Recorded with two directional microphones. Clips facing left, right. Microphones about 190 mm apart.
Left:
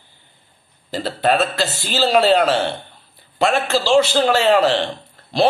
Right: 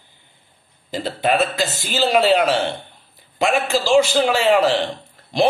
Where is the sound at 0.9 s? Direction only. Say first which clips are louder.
Left 1 dB; 10° right (ahead or behind).